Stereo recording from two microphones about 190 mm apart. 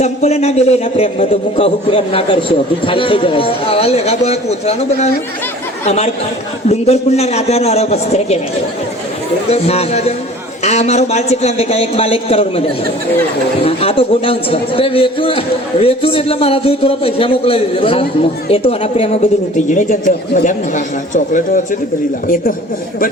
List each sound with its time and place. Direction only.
0.0 s a man's voice: 35° left (ahead or behind)
9.5 s a man's voice: 35° left (ahead or behind)